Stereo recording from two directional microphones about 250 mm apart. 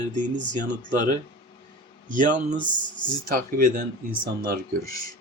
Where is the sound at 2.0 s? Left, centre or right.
Right.